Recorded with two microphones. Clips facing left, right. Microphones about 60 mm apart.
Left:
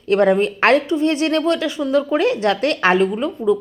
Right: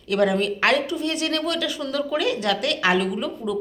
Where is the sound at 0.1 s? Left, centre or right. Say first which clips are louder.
Left 6 dB; left.